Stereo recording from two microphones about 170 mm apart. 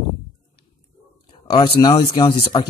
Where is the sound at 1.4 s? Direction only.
25° left (ahead or behind).